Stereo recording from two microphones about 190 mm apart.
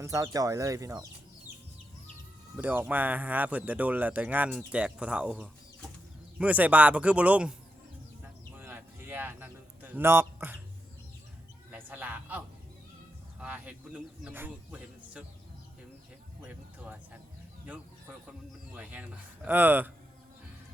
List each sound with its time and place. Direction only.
0.0 s speech: 15° right (ahead or behind)
2.6 s speech: 10° right (ahead or behind)
8.5 s a sound: 10° right (ahead or behind)
11.9 s a sound: 10° right (ahead or behind)
13.4 s speech: 5° right (ahead or behind)
18.7 s speech: 10° right (ahead or behind)